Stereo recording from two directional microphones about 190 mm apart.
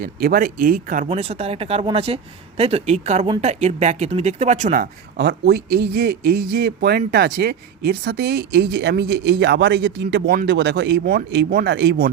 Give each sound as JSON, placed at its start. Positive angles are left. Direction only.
{"t": 0.0, "sound": "speech", "side_deg": -50}
{"t": 5.1, "sound": "speech", "side_deg": -60}